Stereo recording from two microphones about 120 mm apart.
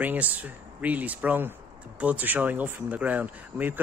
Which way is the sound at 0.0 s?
15° right (ahead or behind).